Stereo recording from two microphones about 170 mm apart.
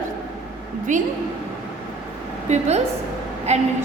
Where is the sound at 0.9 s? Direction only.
50° right (ahead or behind).